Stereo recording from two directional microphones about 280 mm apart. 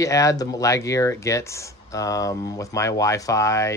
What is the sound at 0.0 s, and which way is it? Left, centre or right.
Speech, centre.